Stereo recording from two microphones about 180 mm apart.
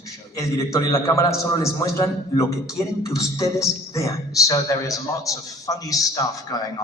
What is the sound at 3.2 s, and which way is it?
A man's voice, 20° left (ahead or behind).